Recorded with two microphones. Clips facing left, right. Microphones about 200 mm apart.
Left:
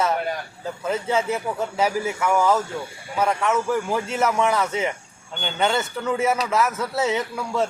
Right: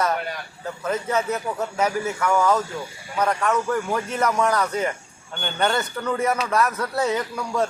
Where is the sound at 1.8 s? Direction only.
10° left (ahead or behind).